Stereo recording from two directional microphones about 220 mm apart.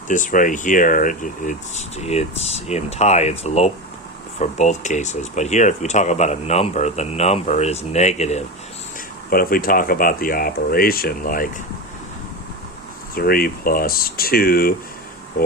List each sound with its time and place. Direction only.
0.1 s speech: 35° left (ahead or behind)
9.3 s speech: 40° left (ahead or behind)
13.1 s speech: 40° left (ahead or behind)